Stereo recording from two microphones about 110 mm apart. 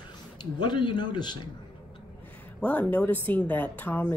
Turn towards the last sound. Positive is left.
turn(degrees=15)  # may be behind; listen again after turning